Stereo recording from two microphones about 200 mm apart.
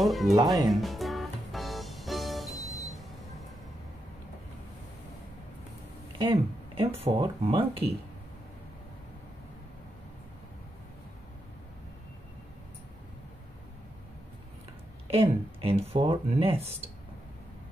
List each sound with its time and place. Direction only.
0.0 s speech: centre (ahead or behind)
0.7 s music: centre (ahead or behind)
6.1 s speech: 25° right (ahead or behind)
15.0 s speech: 30° right (ahead or behind)